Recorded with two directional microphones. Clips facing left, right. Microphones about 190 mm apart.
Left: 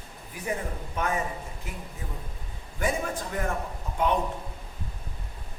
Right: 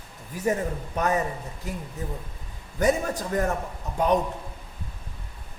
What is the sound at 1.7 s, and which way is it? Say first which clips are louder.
A man's voice: right 10 dB; 40° right (ahead or behind).